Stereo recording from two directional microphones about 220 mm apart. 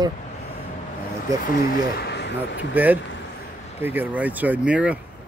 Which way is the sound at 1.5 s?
40° left (ahead or behind).